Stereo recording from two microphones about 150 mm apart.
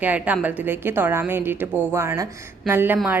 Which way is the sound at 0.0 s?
10° right (ahead or behind).